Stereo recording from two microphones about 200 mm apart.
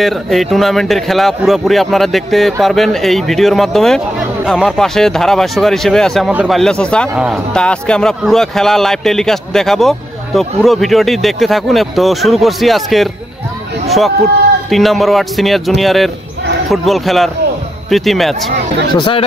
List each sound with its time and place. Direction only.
0.0 s speech: centre (ahead or behind)
13.8 s vehicle: centre (ahead or behind)
14.7 s speech: centre (ahead or behind)
18.9 s speech: 25° left (ahead or behind)